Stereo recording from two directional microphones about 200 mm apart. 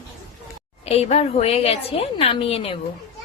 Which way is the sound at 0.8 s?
30° left (ahead or behind).